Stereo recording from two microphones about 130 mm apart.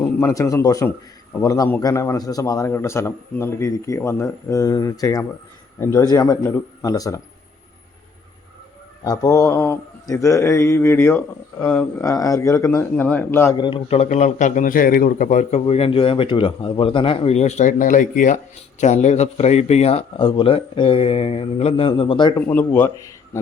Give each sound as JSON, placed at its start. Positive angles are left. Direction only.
{"t": 0.0, "sound": "a man's voice", "side_deg": 15}
{"t": 9.0, "sound": "a man's voice", "side_deg": 30}
{"t": 12.0, "sound": "a man's voice", "side_deg": 25}
{"t": 13.6, "sound": "a man's voice", "side_deg": 35}
{"t": 13.8, "sound": "a man's voice", "side_deg": 55}
{"t": 18.8, "sound": "a man's voice", "side_deg": 60}
{"t": 22.4, "sound": "speech", "side_deg": 15}